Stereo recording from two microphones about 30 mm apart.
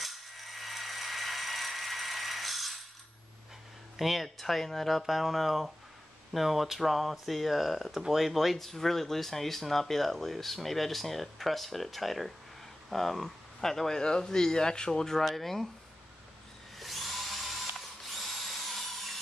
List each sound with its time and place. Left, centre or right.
0.0 s coin: centre
3.9 s speech: centre
8.0 s speech: centre
8.5 s speech: centre
15.1 s speech: centre
16.7 s drill: centre